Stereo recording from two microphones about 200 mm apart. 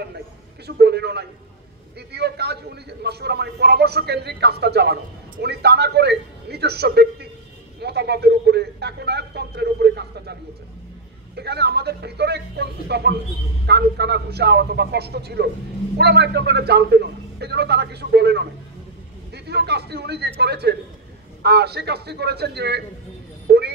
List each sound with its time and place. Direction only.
0.7 s a man's voice: 55° right (ahead or behind)
11.3 s a man's voice: 55° right (ahead or behind)
23.5 s vehicle: 55° right (ahead or behind)